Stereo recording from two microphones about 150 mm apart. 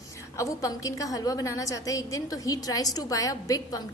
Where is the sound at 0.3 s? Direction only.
20° left (ahead or behind).